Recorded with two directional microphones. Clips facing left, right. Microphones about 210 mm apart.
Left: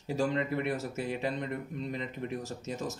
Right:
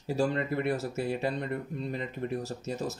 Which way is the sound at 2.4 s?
40° right (ahead or behind).